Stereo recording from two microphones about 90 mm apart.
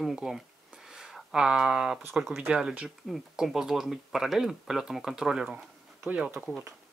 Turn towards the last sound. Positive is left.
turn(degrees=-15)  # may be behind; listen again after turning